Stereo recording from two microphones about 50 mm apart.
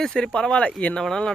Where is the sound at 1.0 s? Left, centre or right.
Centre.